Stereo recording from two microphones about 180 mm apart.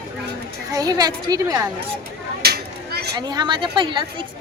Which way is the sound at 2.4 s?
60° right (ahead or behind).